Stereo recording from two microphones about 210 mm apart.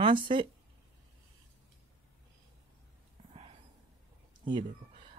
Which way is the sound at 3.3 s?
30° right (ahead or behind).